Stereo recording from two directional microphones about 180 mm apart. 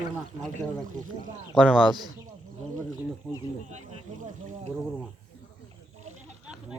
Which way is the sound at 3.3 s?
5° left (ahead or behind).